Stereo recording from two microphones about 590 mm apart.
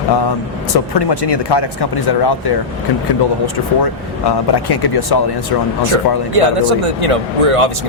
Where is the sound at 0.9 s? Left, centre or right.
Left.